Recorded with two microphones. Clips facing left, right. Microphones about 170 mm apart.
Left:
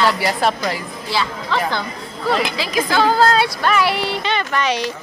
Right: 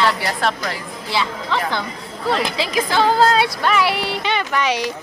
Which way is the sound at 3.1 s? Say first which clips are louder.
Even; 20° right (ahead or behind).